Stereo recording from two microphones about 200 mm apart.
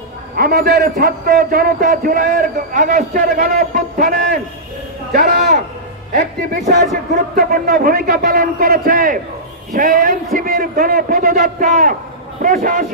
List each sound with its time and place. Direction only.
0.4 s a man's voice: 50° right (ahead or behind)
7.3 s a man's voice: 45° right (ahead or behind)